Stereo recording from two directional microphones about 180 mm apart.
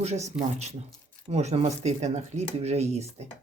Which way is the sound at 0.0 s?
40° right (ahead or behind).